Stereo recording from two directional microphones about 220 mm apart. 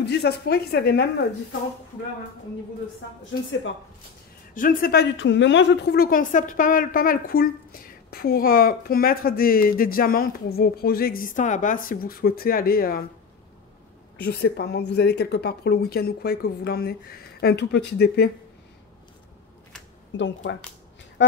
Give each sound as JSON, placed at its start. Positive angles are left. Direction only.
{"t": 0.0, "sound": "speech", "side_deg": 50}
{"t": 4.6, "sound": "a woman's voice", "side_deg": 40}
{"t": 5.1, "sound": "a woman's voice", "side_deg": 55}
{"t": 14.2, "sound": "speech", "side_deg": 50}
{"t": 20.2, "sound": "speech", "side_deg": 55}